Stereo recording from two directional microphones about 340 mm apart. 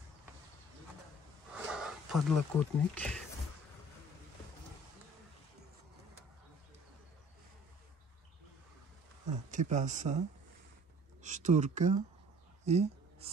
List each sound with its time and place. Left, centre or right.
1.5 s speech: centre
9.3 s speech: right
11.2 s speech: right
12.6 s a sound: centre